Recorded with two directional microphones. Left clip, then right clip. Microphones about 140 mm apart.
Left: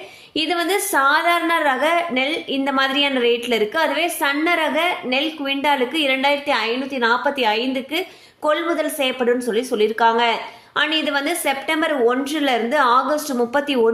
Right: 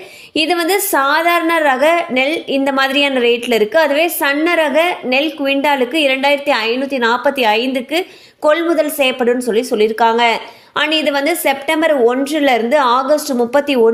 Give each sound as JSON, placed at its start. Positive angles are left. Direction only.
{"t": 0.3, "sound": "a woman's voice", "side_deg": -40}